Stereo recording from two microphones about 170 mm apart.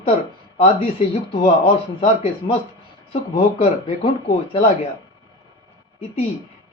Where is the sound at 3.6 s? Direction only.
30° left (ahead or behind).